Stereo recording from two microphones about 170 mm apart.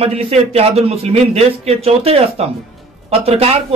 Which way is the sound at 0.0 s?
35° right (ahead or behind).